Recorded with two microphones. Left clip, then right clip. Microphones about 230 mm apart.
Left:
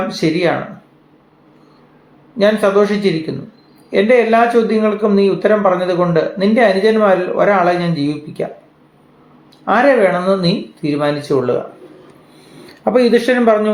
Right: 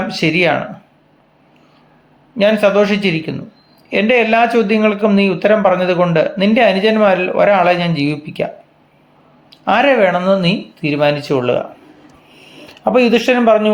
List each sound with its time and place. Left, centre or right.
0.1 s speech: right
2.4 s speech: right
9.6 s speech: right
12.8 s speech: right